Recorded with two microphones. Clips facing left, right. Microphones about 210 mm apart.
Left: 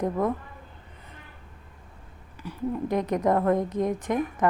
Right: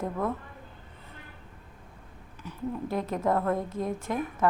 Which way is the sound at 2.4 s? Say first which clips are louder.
Left 4 dB; 15° left (ahead or behind).